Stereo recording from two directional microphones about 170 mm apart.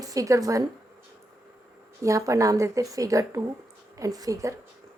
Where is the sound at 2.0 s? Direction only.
20° right (ahead or behind).